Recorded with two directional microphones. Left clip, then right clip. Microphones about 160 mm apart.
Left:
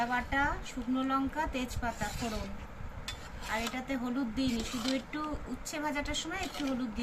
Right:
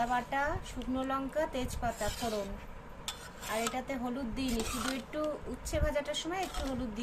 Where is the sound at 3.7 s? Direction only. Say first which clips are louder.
Left 1 dB; 50° right (ahead or behind).